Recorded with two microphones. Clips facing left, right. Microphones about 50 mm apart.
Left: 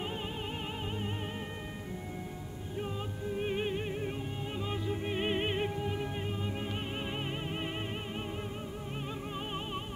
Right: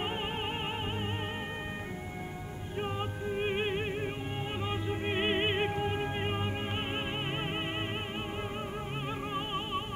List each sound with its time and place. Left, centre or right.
2.8 s music: right
9.3 s music: right